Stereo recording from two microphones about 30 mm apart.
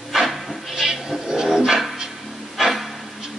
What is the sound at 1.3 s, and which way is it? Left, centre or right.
Dog, right.